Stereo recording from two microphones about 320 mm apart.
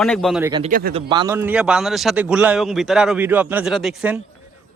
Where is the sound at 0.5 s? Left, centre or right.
Right.